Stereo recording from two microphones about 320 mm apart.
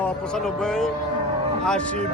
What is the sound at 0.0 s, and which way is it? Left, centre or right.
Speech, centre.